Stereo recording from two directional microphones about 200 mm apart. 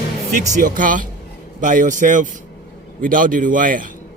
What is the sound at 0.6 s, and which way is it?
A man's voice, 40° right (ahead or behind).